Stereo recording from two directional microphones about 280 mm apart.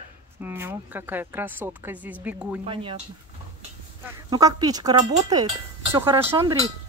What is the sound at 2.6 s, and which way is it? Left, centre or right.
Speech, centre.